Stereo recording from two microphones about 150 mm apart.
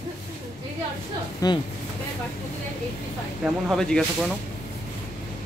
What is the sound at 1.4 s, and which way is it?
Speech, 25° left (ahead or behind).